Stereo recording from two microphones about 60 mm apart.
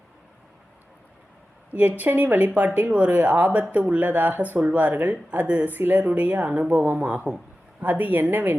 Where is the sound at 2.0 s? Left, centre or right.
Right.